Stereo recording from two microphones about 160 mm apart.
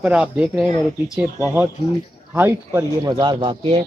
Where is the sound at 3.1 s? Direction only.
30° right (ahead or behind).